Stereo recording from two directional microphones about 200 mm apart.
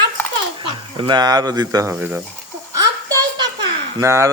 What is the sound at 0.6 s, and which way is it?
Speech, 25° right (ahead or behind).